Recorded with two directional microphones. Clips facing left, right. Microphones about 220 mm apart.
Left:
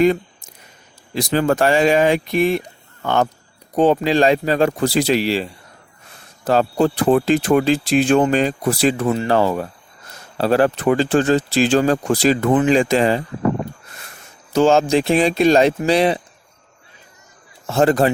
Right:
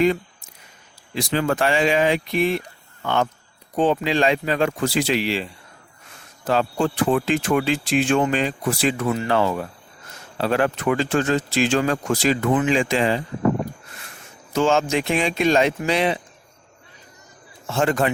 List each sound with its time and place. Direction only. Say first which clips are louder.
0.0 s a sound: left 4 dB; 45° left (ahead or behind)
1.1 s speech: left 4 dB; 40° left (ahead or behind)
14.5 s speech: left 5 dB; 35° left (ahead or behind)
17.7 s speech: left 5 dB; 35° left (ahead or behind)